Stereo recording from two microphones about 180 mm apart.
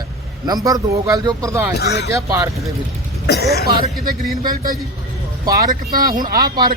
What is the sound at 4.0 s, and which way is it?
Speech, 50° right (ahead or behind).